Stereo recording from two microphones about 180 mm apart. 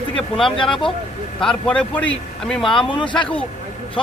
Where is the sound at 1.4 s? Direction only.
5° left (ahead or behind).